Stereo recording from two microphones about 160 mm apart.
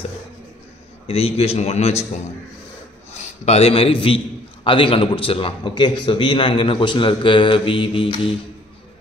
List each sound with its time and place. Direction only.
1.0 s a man's voice: 40° left (ahead or behind)
3.1 s a man's voice: 40° left (ahead or behind)